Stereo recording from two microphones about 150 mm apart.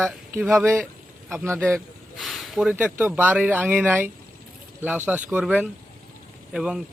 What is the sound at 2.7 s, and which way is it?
Speech, 10° right (ahead or behind).